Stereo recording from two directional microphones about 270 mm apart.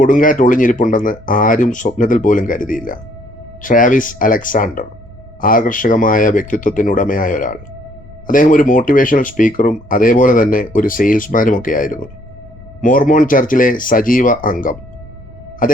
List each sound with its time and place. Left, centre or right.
0.0 s speech: left